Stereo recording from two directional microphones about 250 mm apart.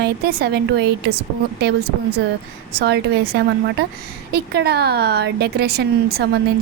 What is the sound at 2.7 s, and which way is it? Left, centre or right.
A woman's voice, right.